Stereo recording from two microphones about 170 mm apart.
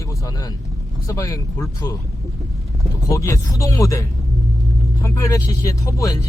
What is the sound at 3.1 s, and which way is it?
Speech, 20° left (ahead or behind).